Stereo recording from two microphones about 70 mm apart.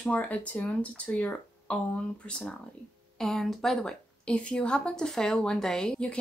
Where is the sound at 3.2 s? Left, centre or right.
Centre.